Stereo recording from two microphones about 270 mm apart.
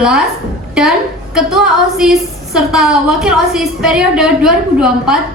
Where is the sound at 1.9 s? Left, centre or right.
Centre.